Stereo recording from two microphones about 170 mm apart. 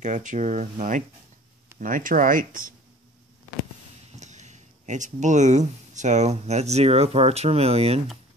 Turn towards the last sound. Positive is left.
turn(degrees=-35)  # may be behind; listen again after turning